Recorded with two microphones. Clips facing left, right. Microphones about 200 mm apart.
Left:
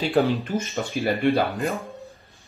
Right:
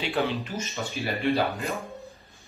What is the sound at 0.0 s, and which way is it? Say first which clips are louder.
Speech: left 6 dB; 45° left (ahead or behind).